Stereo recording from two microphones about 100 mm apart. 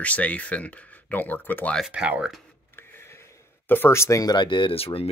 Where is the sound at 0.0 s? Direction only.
15° left (ahead or behind).